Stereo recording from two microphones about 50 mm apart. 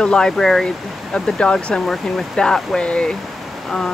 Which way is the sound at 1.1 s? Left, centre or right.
Left.